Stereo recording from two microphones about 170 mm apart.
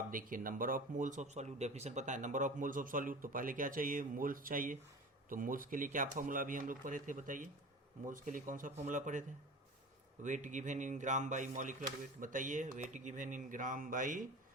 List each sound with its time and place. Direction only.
0.1 s speech: 55° right (ahead or behind)
10.2 s speech: 45° right (ahead or behind)